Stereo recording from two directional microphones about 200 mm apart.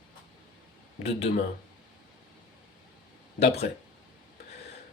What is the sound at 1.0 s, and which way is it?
Speech, 30° left (ahead or behind).